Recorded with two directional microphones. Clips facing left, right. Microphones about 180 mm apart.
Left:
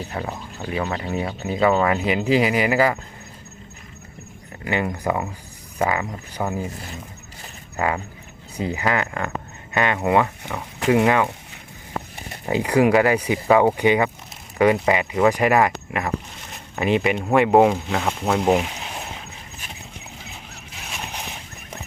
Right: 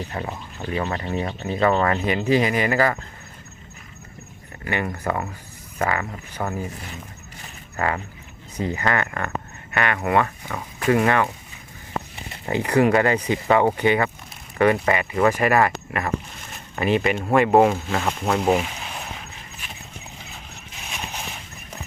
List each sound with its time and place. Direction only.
0.1 s speech: 5° left (ahead or behind)
4.6 s speech: 15° left (ahead or behind)
7.8 s speech: 15° left (ahead or behind)
12.5 s speech: 15° left (ahead or behind)
17.3 s speech: 15° left (ahead or behind)